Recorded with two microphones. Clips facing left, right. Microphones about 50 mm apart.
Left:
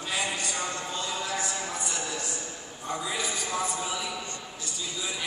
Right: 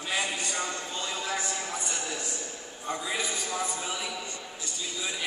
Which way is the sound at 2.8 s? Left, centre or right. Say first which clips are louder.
Even; centre.